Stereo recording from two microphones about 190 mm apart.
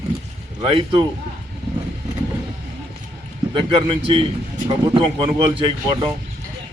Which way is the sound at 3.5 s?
25° right (ahead or behind).